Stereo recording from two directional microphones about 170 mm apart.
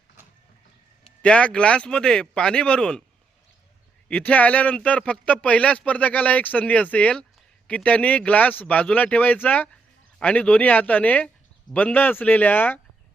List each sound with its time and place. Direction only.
1.2 s speech: 5° left (ahead or behind)
4.1 s speech: 10° left (ahead or behind)